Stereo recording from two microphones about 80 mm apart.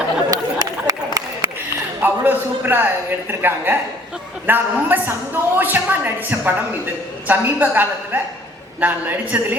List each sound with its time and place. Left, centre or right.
0.3 s chatter: right
2.0 s a woman's voice: right